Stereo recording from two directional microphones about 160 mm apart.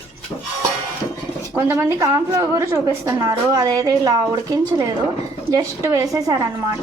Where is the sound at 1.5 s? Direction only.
15° right (ahead or behind).